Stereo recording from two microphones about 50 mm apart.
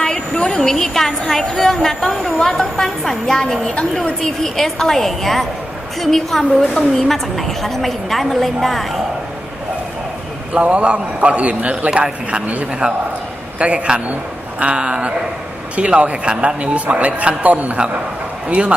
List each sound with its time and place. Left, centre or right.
0.0 s a woman's voice: centre
3.6 s a woman's voice: left
4.4 s a woman's voice: centre
10.5 s speech: right